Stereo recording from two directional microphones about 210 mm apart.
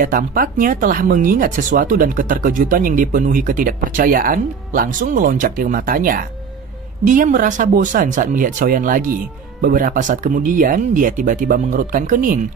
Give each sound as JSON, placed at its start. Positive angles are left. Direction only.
{"t": 0.0, "sound": "speech", "side_deg": -40}